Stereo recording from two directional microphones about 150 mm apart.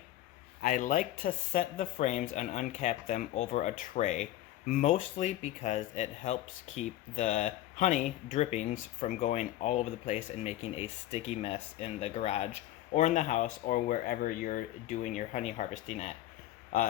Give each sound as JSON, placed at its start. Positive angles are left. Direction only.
{"t": 0.6, "sound": "speech", "side_deg": 55}
{"t": 1.8, "sound": "speech", "side_deg": 50}
{"t": 16.7, "sound": "speech", "side_deg": 60}